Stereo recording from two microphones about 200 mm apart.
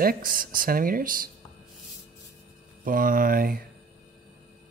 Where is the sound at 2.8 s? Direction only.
45° right (ahead or behind).